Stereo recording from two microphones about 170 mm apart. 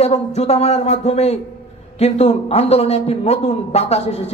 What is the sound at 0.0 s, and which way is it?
A man's voice, 40° left (ahead or behind).